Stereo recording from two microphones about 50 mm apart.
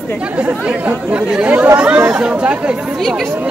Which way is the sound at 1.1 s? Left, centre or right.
Right.